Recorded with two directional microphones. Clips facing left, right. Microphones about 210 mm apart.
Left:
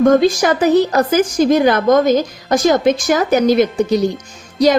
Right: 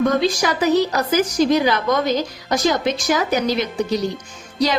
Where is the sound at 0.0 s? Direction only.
50° left (ahead or behind).